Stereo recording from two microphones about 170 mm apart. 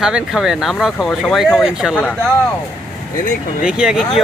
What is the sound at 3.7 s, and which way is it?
Speech, 5° right (ahead or behind).